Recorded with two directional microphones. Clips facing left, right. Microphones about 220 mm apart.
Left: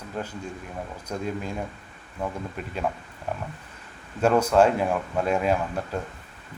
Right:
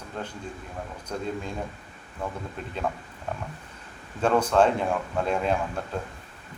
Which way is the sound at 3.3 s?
10° left (ahead or behind).